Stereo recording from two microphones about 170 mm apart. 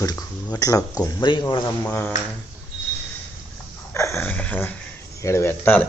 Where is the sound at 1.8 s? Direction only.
10° left (ahead or behind).